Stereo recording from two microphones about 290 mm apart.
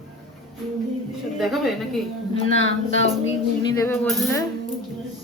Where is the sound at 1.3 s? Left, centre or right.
Centre.